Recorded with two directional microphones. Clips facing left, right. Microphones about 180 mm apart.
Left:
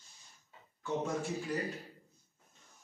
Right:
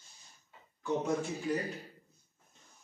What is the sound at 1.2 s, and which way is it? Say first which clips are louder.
Speech: even; centre (ahead or behind).